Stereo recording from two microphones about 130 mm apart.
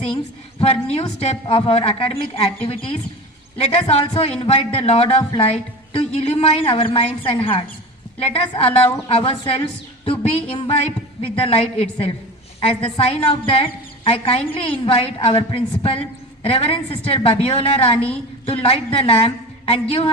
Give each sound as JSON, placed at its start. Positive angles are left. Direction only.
{"t": 0.6, "sound": "a woman's voice", "side_deg": 50}